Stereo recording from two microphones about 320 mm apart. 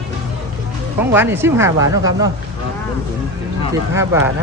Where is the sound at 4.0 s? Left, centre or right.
Centre.